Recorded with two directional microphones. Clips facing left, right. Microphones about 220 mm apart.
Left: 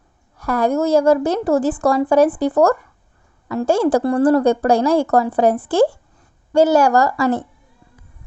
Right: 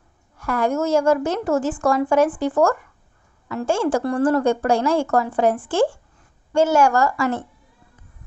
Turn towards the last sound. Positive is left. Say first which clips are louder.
# left 4 dB
turn(degrees=35)  # may be behind; listen again after turning